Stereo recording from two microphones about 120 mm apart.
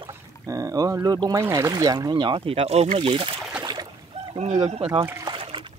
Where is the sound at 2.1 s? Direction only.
45° right (ahead or behind).